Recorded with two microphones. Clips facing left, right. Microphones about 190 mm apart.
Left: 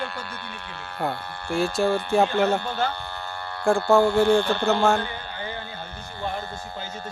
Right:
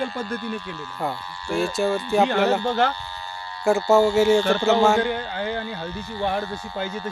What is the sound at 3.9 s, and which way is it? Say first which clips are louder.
Speech: right 1 dB; 55° left (ahead or behind).